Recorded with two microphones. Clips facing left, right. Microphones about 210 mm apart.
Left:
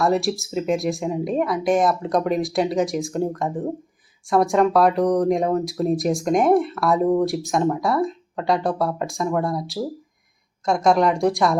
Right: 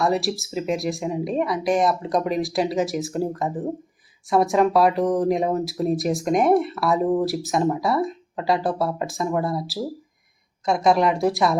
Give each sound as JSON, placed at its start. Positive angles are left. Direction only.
{"t": 0.0, "sound": "speech", "side_deg": 0}